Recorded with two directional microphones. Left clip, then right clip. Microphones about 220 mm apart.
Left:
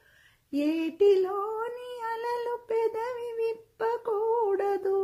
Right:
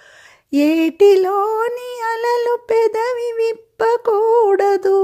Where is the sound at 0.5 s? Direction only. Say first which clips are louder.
Right 13 dB; 40° right (ahead or behind).